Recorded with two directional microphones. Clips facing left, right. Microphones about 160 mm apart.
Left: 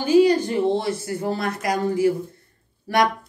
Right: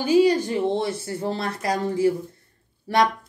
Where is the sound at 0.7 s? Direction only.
25° right (ahead or behind).